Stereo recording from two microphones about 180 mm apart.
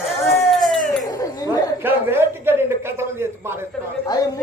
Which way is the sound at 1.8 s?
10° right (ahead or behind).